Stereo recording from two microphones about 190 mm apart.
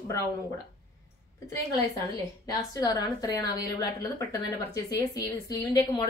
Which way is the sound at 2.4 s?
20° left (ahead or behind).